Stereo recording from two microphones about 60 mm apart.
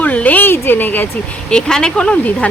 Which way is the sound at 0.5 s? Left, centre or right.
Left.